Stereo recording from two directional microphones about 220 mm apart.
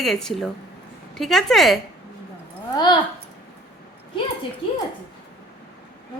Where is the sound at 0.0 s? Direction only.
Centre (ahead or behind).